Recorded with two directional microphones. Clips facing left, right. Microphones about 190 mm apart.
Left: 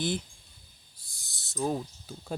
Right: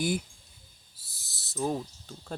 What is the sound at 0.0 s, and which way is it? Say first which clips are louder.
Speech: right 2 dB; 10° right (ahead or behind).